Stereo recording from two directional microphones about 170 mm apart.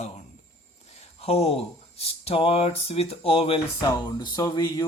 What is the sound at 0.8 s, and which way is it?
Speech, 40° left (ahead or behind).